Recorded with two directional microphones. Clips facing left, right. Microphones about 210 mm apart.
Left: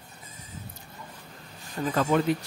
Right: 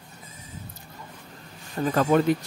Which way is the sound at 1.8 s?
40° right (ahead or behind).